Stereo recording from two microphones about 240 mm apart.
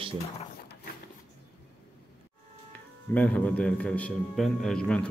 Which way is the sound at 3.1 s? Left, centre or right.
Centre.